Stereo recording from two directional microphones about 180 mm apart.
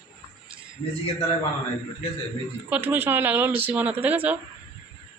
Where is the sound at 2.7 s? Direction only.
10° right (ahead or behind).